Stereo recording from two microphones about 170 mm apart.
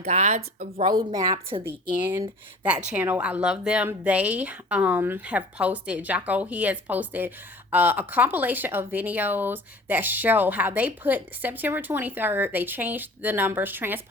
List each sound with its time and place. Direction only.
0.1 s speech: 45° right (ahead or behind)
0.9 s a woman's voice: 25° right (ahead or behind)
1.6 s a woman's voice: 10° right (ahead or behind)